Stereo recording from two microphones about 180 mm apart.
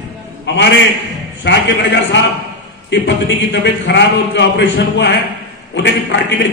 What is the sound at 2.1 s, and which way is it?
A man's voice, 90° left.